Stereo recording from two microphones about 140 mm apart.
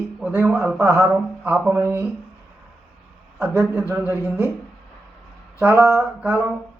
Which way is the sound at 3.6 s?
15° right (ahead or behind).